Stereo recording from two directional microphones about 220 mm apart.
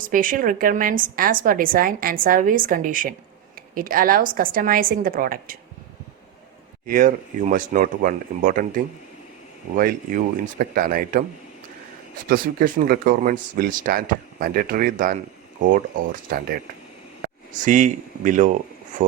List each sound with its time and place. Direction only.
0.0 s a woman's voice: 40° right (ahead or behind)
6.8 s a woman's voice: 35° right (ahead or behind)
12.3 s a woman's voice: 40° right (ahead or behind)
17.2 s speech: 35° right (ahead or behind)